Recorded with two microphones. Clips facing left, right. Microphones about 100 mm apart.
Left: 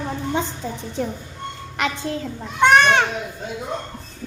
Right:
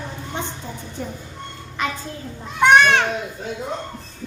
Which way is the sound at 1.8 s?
90° left.